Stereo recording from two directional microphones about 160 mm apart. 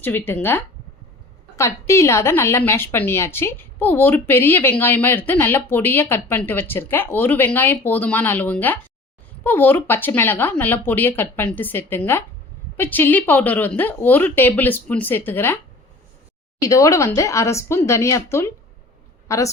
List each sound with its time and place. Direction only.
0.0 s a woman's voice: 15° left (ahead or behind)
16.6 s speech: 20° left (ahead or behind)